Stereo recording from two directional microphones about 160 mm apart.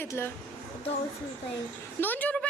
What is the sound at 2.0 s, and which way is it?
Speech, 10° left (ahead or behind).